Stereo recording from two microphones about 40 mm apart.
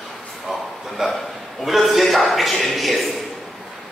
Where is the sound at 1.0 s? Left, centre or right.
Centre.